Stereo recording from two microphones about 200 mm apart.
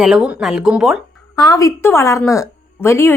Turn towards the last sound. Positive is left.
turn(degrees=10)  # may be behind; listen again after turning